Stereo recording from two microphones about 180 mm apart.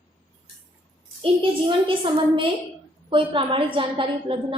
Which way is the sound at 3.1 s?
30° right (ahead or behind).